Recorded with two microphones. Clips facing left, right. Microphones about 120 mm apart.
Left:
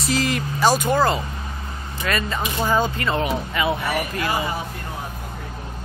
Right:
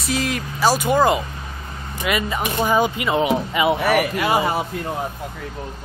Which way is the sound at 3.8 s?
70° right (ahead or behind).